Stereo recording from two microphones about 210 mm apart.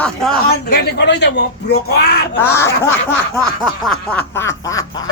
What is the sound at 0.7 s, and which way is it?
Speech, 50° left (ahead or behind).